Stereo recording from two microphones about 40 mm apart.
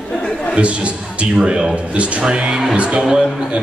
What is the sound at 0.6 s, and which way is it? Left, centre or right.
A man's voice, right.